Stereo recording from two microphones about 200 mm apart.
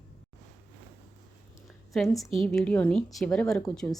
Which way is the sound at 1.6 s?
Centre (ahead or behind).